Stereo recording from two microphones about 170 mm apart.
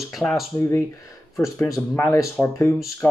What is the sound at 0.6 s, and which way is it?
Speech, 15° left (ahead or behind).